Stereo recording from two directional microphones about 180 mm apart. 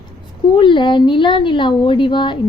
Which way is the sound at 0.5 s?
25° left (ahead or behind).